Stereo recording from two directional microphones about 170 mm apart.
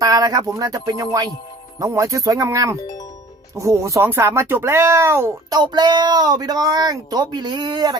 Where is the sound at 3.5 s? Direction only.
15° right (ahead or behind).